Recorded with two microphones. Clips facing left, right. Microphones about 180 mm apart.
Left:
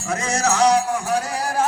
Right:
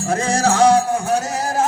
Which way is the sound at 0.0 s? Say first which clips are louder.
Right 4 dB; 30° right (ahead or behind).